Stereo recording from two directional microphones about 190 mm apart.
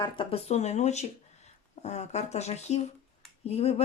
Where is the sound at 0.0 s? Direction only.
30° left (ahead or behind).